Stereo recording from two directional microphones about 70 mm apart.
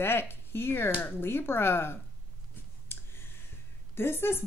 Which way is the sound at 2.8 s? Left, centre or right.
Left.